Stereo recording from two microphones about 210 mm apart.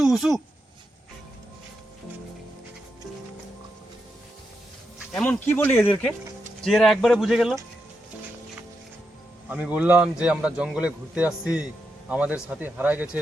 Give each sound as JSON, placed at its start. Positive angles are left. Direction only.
{"t": 0.0, "sound": "a sound", "side_deg": 0}
{"t": 5.1, "sound": "a man's voice", "side_deg": 5}
{"t": 9.5, "sound": "a man's voice", "side_deg": -5}